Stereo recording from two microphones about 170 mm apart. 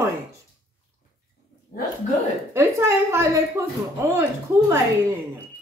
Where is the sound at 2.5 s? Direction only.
15° right (ahead or behind).